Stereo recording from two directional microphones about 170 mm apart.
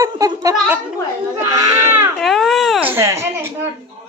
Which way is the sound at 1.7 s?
15° right (ahead or behind).